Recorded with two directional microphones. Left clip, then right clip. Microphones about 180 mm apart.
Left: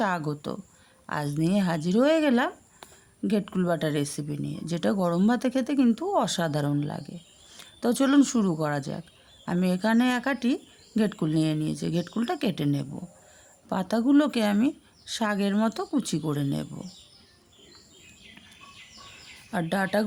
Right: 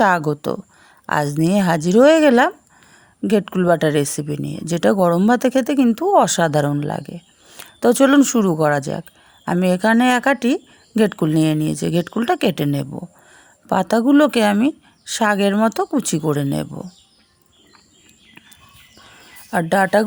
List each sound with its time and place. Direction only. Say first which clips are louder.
0.0 s speech: right 12 dB; 45° right (ahead or behind)
19.5 s speech: right 11 dB; 45° right (ahead or behind)